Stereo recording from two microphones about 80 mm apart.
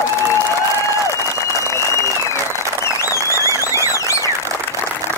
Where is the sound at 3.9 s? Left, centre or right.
Left.